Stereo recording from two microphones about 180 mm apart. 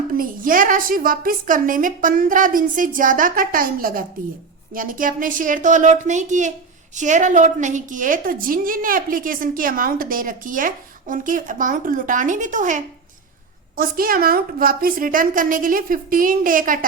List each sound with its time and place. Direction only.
0.1 s a woman's voice: 50° right (ahead or behind)